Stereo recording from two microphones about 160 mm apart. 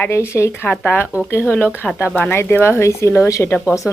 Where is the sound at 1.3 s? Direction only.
15° left (ahead or behind).